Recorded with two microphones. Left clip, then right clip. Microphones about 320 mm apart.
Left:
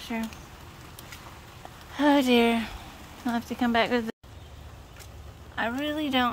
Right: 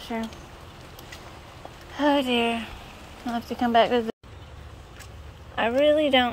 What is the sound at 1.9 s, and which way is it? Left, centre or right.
Speech, centre.